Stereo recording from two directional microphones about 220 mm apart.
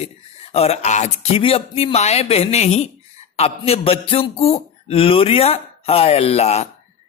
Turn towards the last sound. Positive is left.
turn(degrees=30)  # may be behind; listen again after turning